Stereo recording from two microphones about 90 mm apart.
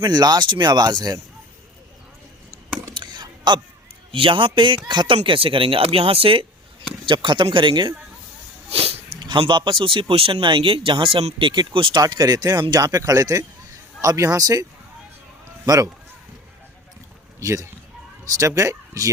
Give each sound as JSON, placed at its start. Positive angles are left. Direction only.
{"t": 0.0, "sound": "speech", "side_deg": -50}
{"t": 2.9, "sound": "a sound", "side_deg": -55}
{"t": 4.1, "sound": "speech", "side_deg": -70}
{"t": 7.1, "sound": "speech", "side_deg": -65}
{"t": 8.7, "sound": "speech", "side_deg": -90}
{"t": 11.9, "sound": "speech", "side_deg": -50}
{"t": 17.4, "sound": "speech", "side_deg": -35}